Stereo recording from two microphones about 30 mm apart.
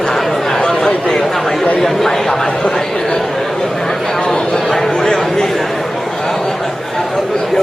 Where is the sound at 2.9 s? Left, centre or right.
Left.